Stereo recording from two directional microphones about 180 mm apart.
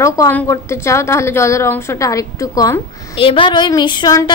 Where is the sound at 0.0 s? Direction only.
15° left (ahead or behind).